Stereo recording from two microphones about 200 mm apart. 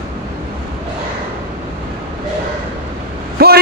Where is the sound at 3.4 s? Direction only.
50° right (ahead or behind).